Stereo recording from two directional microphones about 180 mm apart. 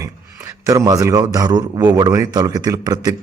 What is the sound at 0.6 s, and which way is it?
Speech, 20° right (ahead or behind).